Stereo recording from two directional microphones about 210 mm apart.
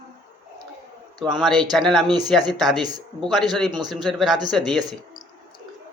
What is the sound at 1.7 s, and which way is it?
Speech, centre (ahead or behind).